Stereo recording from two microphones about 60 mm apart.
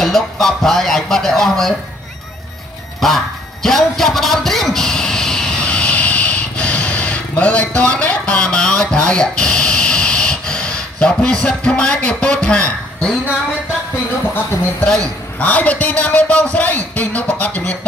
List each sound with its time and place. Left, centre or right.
0.0 s speech: centre
3.0 s speech: centre
3.6 s a sound: centre
15.3 s a man's voice: left